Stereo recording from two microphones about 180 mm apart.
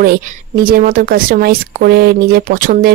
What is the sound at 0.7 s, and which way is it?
Speech, 50° right (ahead or behind).